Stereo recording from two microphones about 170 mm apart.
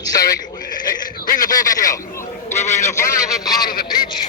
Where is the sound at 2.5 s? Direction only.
45° left (ahead or behind).